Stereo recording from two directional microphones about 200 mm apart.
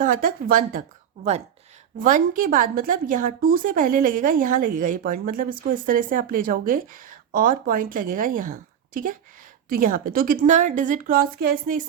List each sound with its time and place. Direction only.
0.0 s a woman's voice: 45° right (ahead or behind)